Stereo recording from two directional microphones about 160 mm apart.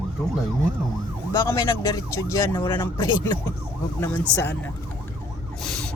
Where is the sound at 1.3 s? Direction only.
20° left (ahead or behind).